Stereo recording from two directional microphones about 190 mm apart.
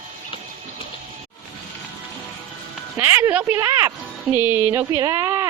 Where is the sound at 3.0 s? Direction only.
10° right (ahead or behind).